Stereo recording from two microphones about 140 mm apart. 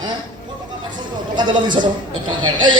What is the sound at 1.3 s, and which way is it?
A man's voice, 35° right (ahead or behind).